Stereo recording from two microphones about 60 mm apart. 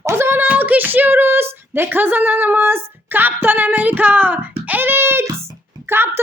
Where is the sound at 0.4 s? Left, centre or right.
Right.